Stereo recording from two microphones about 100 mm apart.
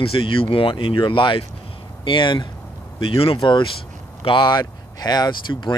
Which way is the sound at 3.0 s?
70° left (ahead or behind).